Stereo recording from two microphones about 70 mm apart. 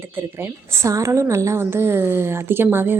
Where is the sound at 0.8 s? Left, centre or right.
Right.